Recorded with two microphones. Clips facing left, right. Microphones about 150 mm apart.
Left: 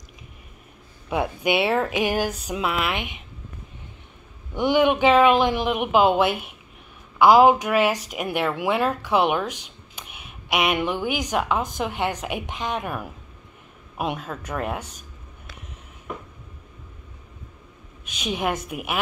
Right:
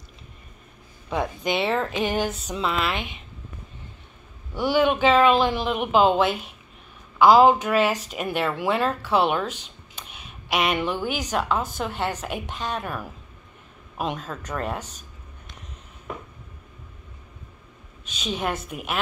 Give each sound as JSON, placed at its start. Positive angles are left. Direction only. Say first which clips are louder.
{"t": 1.1, "sound": "speech", "louder": "left 3 dB", "side_deg": 10}
{"t": 4.6, "sound": "speech", "louder": "left 2 dB", "side_deg": 15}
{"t": 18.0, "sound": "speech", "louder": "left 2 dB", "side_deg": 15}